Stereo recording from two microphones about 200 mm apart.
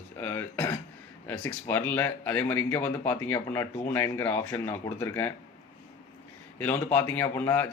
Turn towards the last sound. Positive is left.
turn(degrees=10)  # may be behind; listen again after turning